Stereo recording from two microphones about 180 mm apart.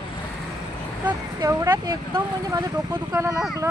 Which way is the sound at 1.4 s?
20° right (ahead or behind).